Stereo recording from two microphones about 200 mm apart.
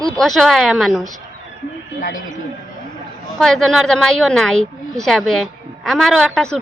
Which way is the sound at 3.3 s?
Centre (ahead or behind).